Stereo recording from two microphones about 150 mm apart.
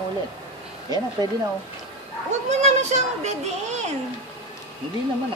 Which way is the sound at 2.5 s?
50° right (ahead or behind).